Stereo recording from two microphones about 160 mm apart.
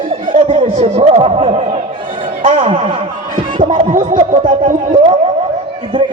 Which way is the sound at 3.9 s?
55° right (ahead or behind).